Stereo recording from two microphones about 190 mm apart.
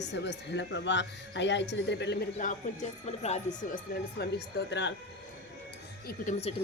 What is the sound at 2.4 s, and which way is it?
Speech, 40° left (ahead or behind).